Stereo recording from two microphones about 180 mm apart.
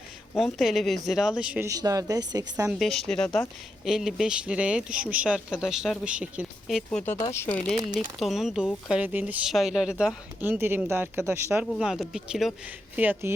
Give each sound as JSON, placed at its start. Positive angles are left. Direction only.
{"t": 0.3, "sound": "speech", "side_deg": 0}
{"t": 1.6, "sound": "speech", "side_deg": -20}
{"t": 2.6, "sound": "speech", "side_deg": 0}
{"t": 7.0, "sound": "speech", "side_deg": 15}
{"t": 8.2, "sound": "speech", "side_deg": 0}
{"t": 11.8, "sound": "speech", "side_deg": -5}